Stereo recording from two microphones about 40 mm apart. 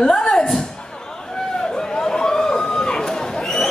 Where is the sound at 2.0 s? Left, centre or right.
Centre.